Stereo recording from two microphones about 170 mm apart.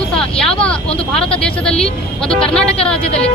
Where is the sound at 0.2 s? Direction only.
5° left (ahead or behind).